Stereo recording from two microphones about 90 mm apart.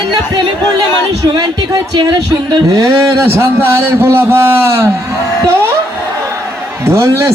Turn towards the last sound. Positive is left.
turn(degrees=-30)  # may be behind; listen again after turning